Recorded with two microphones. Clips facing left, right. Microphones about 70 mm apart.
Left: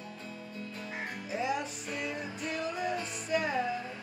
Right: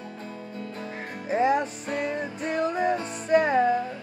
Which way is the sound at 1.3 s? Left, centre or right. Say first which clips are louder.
Right 11 dB; right.